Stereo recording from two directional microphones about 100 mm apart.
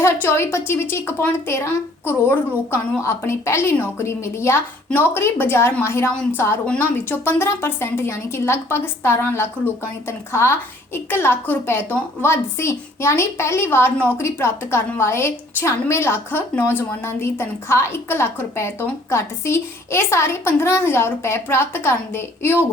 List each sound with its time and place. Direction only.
0.0 s a woman's voice: 25° left (ahead or behind)